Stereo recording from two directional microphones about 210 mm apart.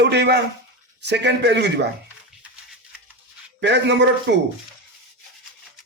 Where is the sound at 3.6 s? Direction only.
55° right (ahead or behind).